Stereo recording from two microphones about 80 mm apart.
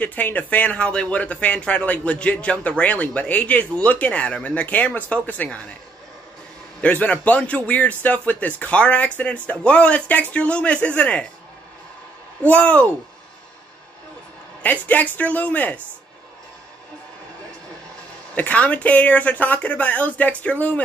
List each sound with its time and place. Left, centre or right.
0.0 s speech: left
6.8 s speech: centre
12.4 s speech: centre
14.6 s speech: left
18.3 s speech: centre